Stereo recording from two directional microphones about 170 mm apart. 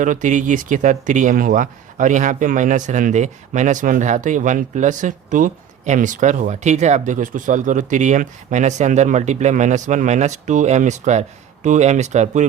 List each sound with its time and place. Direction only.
0.0 s speech: 50° right (ahead or behind)